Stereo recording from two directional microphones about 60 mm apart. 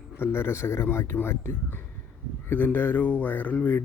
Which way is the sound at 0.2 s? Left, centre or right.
Left.